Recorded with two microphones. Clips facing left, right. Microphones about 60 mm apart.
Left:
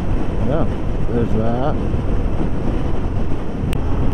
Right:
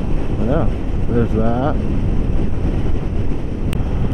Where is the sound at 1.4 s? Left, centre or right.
Right.